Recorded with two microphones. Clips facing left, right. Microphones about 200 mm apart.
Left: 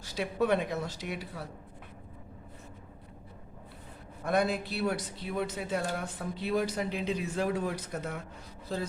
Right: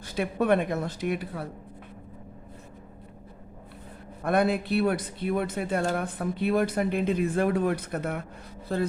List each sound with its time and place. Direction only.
0.0 s speech: 55° right (ahead or behind)
4.2 s speech: 55° right (ahead or behind)